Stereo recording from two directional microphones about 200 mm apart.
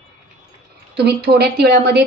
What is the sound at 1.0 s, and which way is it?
Speech, 55° right (ahead or behind).